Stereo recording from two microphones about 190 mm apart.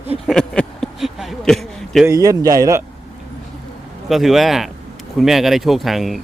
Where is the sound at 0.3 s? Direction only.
5° left (ahead or behind).